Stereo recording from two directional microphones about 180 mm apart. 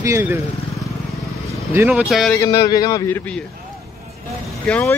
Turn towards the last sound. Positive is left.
turn(degrees=10)  # may be behind; listen again after turning